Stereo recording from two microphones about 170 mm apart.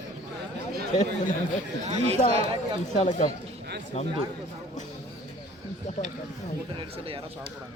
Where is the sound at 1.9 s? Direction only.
35° right (ahead or behind).